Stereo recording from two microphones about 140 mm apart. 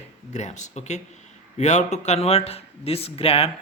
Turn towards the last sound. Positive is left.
turn(degrees=45)  # may be behind; listen again after turning